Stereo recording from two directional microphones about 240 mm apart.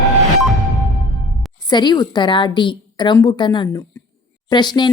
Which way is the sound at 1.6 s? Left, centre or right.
Centre.